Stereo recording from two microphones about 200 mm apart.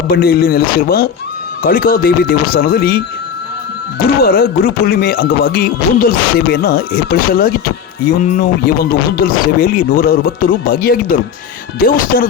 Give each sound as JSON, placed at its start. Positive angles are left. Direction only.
{"t": 0.1, "sound": "speech", "side_deg": 50}
{"t": 4.0, "sound": "speech", "side_deg": 50}